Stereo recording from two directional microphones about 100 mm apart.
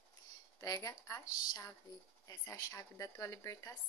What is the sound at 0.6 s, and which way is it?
A woman's voice, 35° left (ahead or behind).